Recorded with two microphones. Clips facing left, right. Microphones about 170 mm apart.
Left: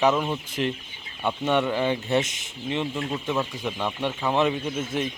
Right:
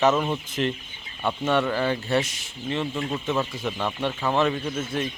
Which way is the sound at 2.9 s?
Centre (ahead or behind).